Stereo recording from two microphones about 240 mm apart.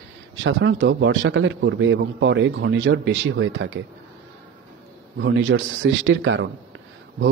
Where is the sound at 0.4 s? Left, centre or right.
Right.